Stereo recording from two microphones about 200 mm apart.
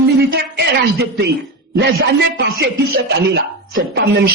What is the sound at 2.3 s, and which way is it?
Speech, 50° right (ahead or behind).